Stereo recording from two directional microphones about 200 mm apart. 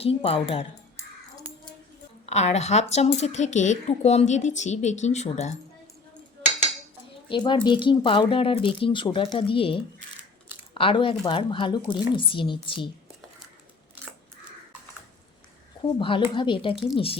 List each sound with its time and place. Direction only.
0.0 s speech: 30° left (ahead or behind)
2.2 s speech: 35° left (ahead or behind)
7.3 s speech: 25° left (ahead or behind)
10.8 s speech: 25° left (ahead or behind)
15.8 s speech: 25° left (ahead or behind)